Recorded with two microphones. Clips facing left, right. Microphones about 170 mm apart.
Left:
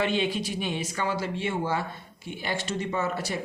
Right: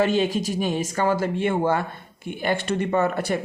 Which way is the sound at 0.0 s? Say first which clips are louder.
Right 6 dB; 45° right (ahead or behind).